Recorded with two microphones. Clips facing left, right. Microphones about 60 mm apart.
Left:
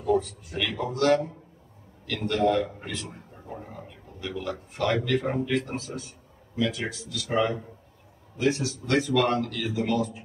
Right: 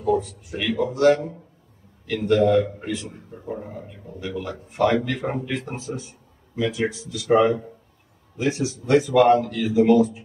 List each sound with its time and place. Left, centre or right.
0.1 s a man's voice: centre
2.4 s a man's voice: centre
2.8 s a man's voice: centre